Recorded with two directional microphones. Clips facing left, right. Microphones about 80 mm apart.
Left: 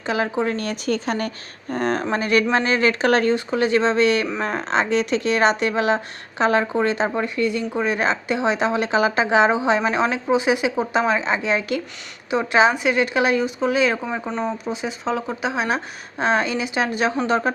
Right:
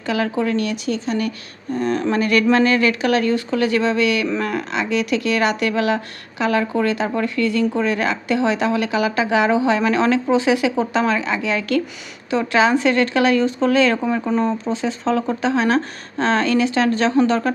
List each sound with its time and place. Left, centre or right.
0.0 s speech: left
2.0 s a woman's voice: left
3.3 s a woman's voice: left
14.3 s speech: centre
14.7 s speech: centre